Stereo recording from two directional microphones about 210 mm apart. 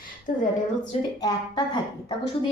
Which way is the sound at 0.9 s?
20° left (ahead or behind).